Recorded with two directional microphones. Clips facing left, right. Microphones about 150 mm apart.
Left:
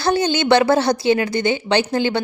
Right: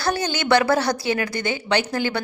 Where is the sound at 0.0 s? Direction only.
25° left (ahead or behind).